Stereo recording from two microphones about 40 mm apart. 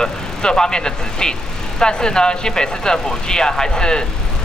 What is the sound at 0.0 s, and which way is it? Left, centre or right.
Speech, centre.